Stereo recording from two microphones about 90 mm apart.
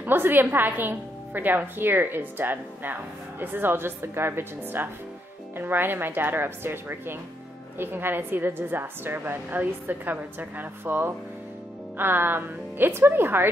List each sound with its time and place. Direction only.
0.0 s a woman's voice: 25° right (ahead or behind)